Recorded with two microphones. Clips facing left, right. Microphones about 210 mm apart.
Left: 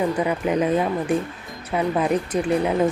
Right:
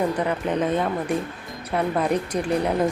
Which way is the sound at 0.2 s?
10° left (ahead or behind).